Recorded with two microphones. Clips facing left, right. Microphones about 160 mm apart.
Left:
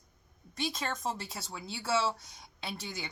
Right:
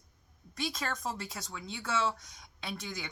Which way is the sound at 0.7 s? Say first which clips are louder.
Left 1 dB; 25° left (ahead or behind).